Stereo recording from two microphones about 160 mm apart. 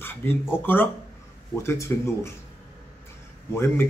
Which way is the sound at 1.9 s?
15° left (ahead or behind).